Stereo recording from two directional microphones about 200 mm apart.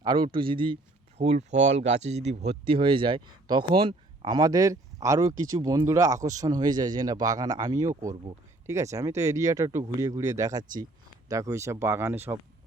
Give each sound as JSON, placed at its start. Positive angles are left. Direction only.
{"t": 0.0, "sound": "speech", "side_deg": -25}